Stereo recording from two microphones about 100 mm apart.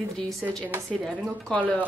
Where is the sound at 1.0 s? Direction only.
10° left (ahead or behind).